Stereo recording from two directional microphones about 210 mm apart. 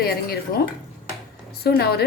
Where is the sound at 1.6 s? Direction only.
50° left (ahead or behind).